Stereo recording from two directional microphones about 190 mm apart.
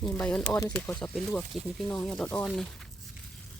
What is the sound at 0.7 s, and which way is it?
Speech, 5° left (ahead or behind).